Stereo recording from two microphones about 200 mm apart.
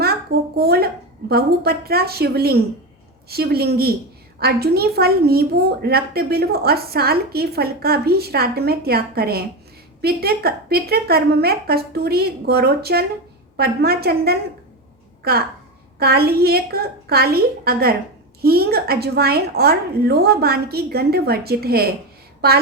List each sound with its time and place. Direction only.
0.5 s a woman's voice: 50° right (ahead or behind)